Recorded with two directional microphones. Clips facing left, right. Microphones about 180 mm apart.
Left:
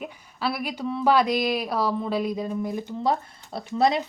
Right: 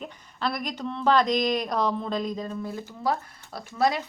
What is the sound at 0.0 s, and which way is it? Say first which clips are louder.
Speech: left 1 dB; 5° left (ahead or behind).